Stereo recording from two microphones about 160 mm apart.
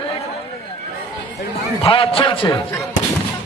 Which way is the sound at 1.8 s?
35° left (ahead or behind).